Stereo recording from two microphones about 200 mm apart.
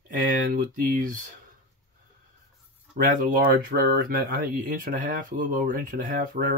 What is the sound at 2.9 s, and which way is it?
Speech, 45° right (ahead or behind).